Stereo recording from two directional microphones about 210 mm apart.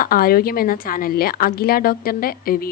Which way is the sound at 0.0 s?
45° left (ahead or behind).